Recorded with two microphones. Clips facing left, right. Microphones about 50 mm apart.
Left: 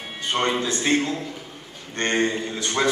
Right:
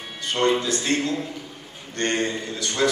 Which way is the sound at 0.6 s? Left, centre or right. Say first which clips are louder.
Left 2 dB; left.